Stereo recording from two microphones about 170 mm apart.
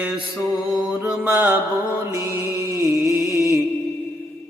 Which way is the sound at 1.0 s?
5° right (ahead or behind).